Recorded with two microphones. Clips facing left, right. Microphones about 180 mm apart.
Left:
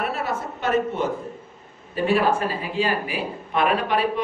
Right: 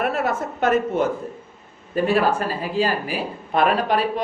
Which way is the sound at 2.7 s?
40° right (ahead or behind).